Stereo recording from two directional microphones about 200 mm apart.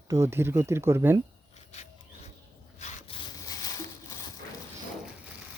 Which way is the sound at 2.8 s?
35° left (ahead or behind).